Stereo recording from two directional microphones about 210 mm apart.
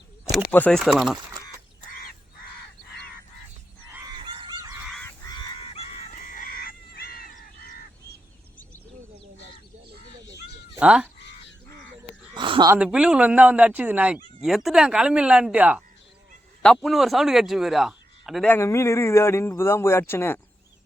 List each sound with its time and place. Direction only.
0.5 s speech: 5° left (ahead or behind)
4.4 s fowl: 20° right (ahead or behind)
4.8 s goose: centre (ahead or behind)
5.0 s chicken: 20° left (ahead or behind); by 7.9 s 45° left (ahead or behind)
10.3 s cat: 5° right (ahead or behind)
12.3 s a sound: 20° right (ahead or behind)
12.7 s a man's voice: 5° right (ahead or behind); by 20.4 s 10° left (ahead or behind)